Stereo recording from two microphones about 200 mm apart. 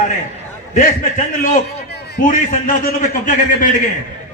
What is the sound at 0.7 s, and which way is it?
A man's voice, 40° left (ahead or behind).